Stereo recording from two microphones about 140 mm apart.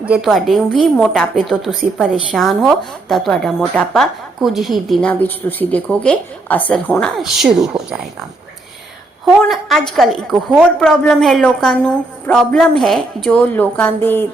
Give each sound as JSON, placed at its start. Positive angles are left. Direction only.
{"t": 0.0, "sound": "a woman's voice", "side_deg": -5}
{"t": 9.2, "sound": "a woman's voice", "side_deg": 0}